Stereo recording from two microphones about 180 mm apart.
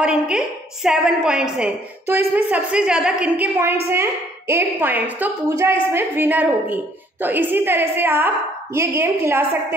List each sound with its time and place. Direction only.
0.0 s a woman's voice: 5° right (ahead or behind)